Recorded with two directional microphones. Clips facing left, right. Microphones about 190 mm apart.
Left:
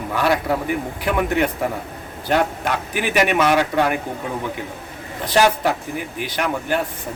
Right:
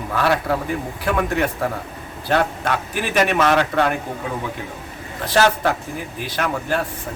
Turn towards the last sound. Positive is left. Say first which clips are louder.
# left 1 dB
turn(degrees=15)  # may be behind; listen again after turning